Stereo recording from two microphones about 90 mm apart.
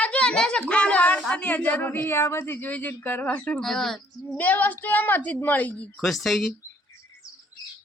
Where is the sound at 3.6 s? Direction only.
5° left (ahead or behind).